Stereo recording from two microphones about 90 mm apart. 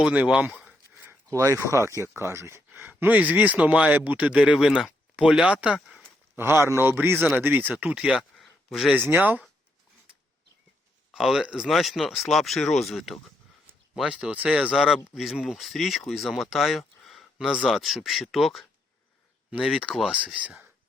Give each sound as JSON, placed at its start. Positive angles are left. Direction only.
{"t": 0.0, "sound": "speech", "side_deg": -15}
{"t": 1.6, "sound": "speech", "side_deg": -30}
{"t": 3.0, "sound": "speech", "side_deg": -15}
{"t": 6.3, "sound": "a man's voice", "side_deg": -25}
{"t": 8.4, "sound": "a sound", "side_deg": 0}
{"t": 9.0, "sound": "a man's voice", "side_deg": -20}
{"t": 11.1, "sound": "speech", "side_deg": -5}